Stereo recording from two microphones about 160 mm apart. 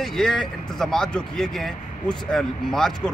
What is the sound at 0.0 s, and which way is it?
Speech, centre (ahead or behind).